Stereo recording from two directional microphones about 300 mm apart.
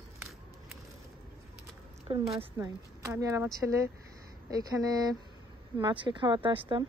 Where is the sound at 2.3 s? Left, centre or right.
Centre.